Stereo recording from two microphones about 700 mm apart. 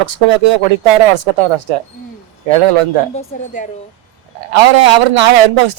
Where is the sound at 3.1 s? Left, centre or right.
Centre.